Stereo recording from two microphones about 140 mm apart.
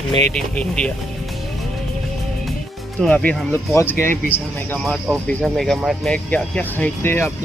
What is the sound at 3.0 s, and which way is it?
Speech, 10° left (ahead or behind).